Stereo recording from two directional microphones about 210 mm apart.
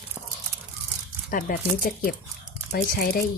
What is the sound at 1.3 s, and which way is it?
Speech, 40° left (ahead or behind).